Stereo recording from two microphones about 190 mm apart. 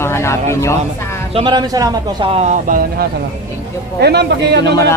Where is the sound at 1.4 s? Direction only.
25° right (ahead or behind); by 3.1 s 45° right (ahead or behind).